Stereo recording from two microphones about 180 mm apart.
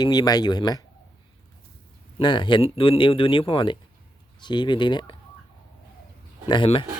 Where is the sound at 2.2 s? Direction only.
25° left (ahead or behind).